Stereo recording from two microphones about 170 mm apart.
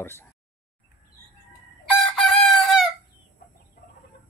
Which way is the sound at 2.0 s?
Centre (ahead or behind).